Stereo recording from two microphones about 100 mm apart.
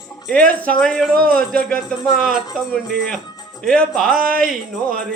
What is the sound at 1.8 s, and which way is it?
Music, 45° left (ahead or behind).